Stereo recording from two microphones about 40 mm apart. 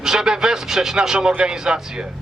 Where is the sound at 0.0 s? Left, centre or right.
Centre.